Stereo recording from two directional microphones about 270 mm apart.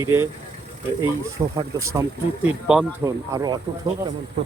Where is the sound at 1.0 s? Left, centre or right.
Centre.